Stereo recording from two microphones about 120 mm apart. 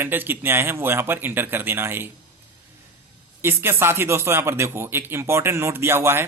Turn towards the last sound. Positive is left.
turn(degrees=-20)  # may be behind; listen again after turning